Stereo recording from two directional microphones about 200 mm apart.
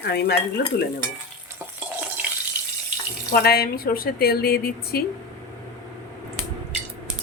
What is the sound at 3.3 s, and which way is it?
Speech, 50° left (ahead or behind).